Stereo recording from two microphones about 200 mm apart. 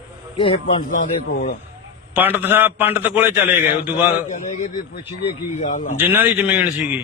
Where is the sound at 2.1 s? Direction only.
10° right (ahead or behind).